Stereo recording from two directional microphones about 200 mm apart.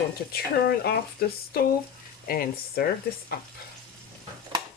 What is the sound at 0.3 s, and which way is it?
Speech, 50° left (ahead or behind).